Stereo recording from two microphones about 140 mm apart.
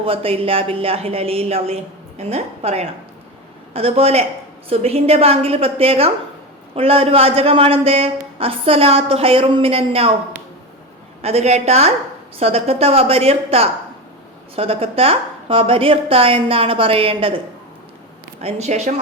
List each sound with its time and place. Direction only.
0.0 s a man's voice: 40° right (ahead or behind)
11.2 s a man's voice: 50° right (ahead or behind)
18.4 s a man's voice: 55° right (ahead or behind)